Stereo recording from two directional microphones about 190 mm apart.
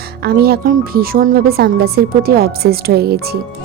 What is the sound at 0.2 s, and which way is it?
A woman's voice, 55° right (ahead or behind).